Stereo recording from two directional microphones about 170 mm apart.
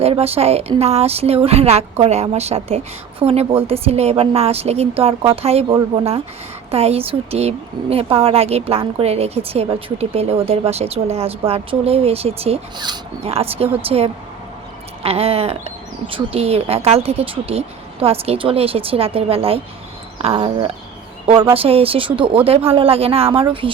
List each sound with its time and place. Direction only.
0.0 s speech: 35° right (ahead or behind)